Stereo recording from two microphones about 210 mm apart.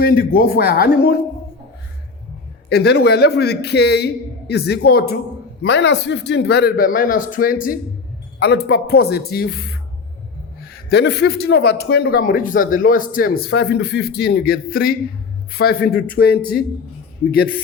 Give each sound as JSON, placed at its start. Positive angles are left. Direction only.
{"t": 0.0, "sound": "speech", "side_deg": 45}
{"t": 2.6, "sound": "speech", "side_deg": 50}
{"t": 10.8, "sound": "speech", "side_deg": 55}